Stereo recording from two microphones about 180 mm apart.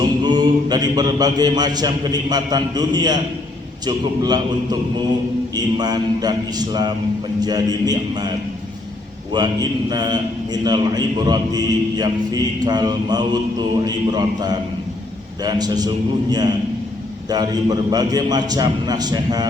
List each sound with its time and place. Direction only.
0.0 s mantra: 25° right (ahead or behind)
3.8 s a man's voice: 20° right (ahead or behind)
9.3 s a man's voice: 20° right (ahead or behind)
17.2 s a man's voice: 20° right (ahead or behind)